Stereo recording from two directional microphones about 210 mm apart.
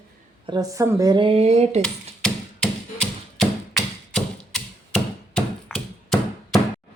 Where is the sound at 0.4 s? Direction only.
20° right (ahead or behind).